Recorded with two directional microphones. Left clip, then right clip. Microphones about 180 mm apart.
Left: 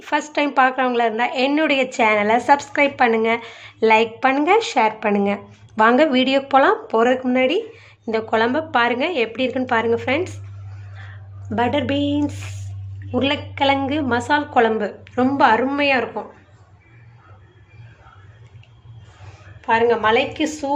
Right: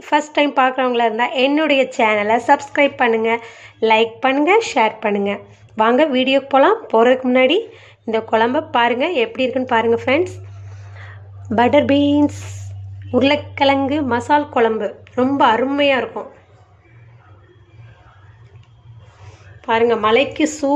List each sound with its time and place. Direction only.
0.0 s a woman's voice: 10° right (ahead or behind)
10.9 s a sound: 15° right (ahead or behind)
13.1 s a woman's voice: 15° right (ahead or behind)
19.6 s a woman's voice: 25° right (ahead or behind)